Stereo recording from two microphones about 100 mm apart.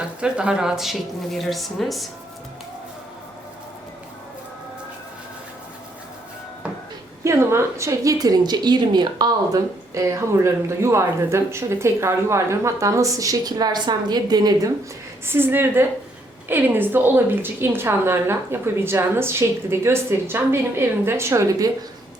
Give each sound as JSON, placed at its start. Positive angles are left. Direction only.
{"t": 0.2, "sound": "a woman's voice", "side_deg": -10}
{"t": 7.3, "sound": "a woman's voice", "side_deg": -25}
{"t": 15.3, "sound": "a woman's voice", "side_deg": -20}